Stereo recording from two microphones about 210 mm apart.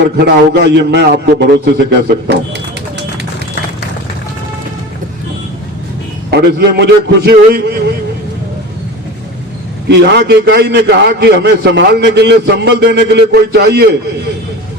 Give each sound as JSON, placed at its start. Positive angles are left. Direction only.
{"t": 0.2, "sound": "a man's voice", "side_deg": -55}
{"t": 6.3, "sound": "a man's voice", "side_deg": -50}
{"t": 9.9, "sound": "a man's voice", "side_deg": -55}